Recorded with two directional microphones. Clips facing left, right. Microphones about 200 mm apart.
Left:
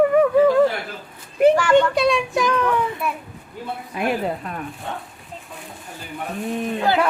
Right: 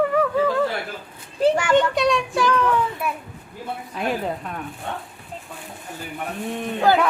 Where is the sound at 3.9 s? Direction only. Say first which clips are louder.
Left 3 dB; 10° left (ahead or behind).